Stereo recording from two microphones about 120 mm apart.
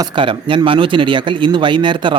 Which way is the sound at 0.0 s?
45° right (ahead or behind).